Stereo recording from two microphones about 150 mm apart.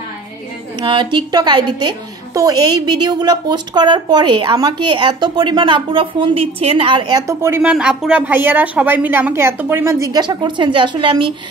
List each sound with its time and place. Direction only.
0.7 s a woman's voice: 30° right (ahead or behind); by 7.7 s 15° right (ahead or behind)
7.7 s a woman's voice: 5° right (ahead or behind); by 11.3 s 35° right (ahead or behind)